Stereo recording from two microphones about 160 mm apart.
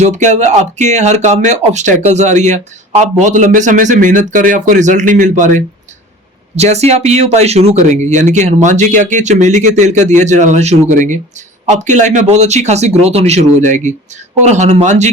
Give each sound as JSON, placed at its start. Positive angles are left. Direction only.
{"t": 0.0, "sound": "speech", "side_deg": -50}